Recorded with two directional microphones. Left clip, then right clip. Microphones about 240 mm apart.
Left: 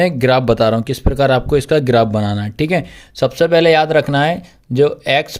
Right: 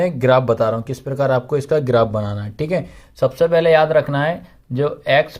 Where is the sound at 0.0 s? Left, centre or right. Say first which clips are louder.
Left 2 dB; left.